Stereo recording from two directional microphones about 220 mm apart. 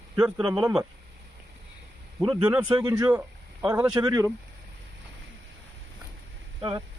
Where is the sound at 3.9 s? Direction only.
15° right (ahead or behind).